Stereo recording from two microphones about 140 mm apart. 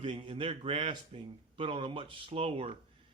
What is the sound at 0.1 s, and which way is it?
A man's voice, 45° right (ahead or behind).